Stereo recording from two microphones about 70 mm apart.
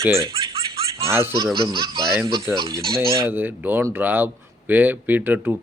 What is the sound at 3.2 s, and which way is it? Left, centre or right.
Speech, right.